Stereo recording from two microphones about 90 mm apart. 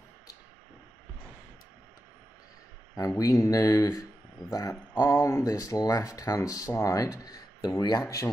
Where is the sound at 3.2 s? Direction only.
35° left (ahead or behind).